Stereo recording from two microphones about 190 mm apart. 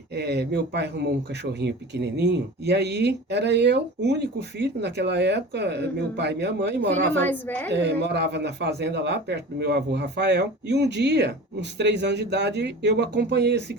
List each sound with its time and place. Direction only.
0.1 s speech: 60° right (ahead or behind)
6.9 s a woman's voice: 10° left (ahead or behind)
7.7 s speech: 65° right (ahead or behind)